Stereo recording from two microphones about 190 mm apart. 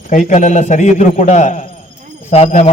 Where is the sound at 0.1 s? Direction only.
45° left (ahead or behind).